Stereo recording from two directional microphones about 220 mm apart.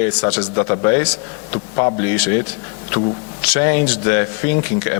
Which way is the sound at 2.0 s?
10° left (ahead or behind).